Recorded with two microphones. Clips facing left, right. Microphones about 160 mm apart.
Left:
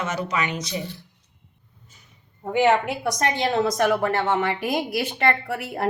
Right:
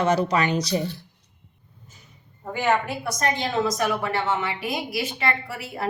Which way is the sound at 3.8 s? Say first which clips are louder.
Left 4 dB; 50° left (ahead or behind).